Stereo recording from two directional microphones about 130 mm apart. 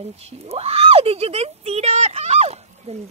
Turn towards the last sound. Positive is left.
turn(degrees=-55)  # may be behind; listen again after turning